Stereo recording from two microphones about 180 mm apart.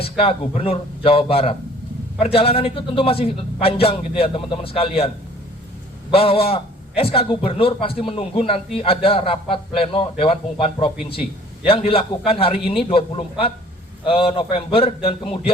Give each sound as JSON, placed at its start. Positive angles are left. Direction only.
{"t": 0.0, "sound": "a man's voice", "side_deg": 30}